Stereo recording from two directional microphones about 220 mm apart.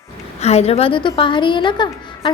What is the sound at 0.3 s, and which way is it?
A woman's voice, 30° left (ahead or behind).